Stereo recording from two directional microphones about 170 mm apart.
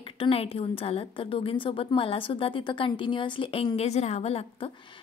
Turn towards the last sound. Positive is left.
turn(degrees=35)  # may be behind; listen again after turning